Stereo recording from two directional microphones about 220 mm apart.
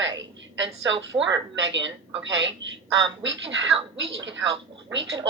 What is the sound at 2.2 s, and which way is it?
Speech, 55° right (ahead or behind).